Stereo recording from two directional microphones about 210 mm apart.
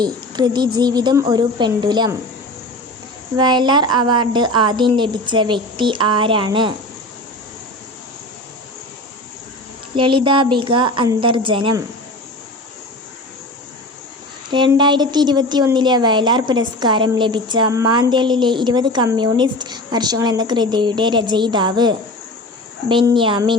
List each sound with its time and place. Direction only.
0.0 s a woman's voice: 20° right (ahead or behind)
3.3 s a woman's voice: 20° right (ahead or behind)
9.9 s a woman's voice: 25° right (ahead or behind)
14.5 s a woman's voice: 20° right (ahead or behind)